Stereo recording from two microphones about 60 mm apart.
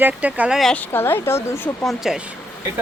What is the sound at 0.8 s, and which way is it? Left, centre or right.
Speech, left.